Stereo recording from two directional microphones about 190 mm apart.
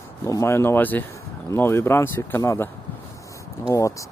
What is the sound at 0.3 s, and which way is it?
Speech, 15° left (ahead or behind).